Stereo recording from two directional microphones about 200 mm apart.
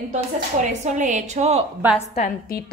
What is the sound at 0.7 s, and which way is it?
Speech, 35° right (ahead or behind).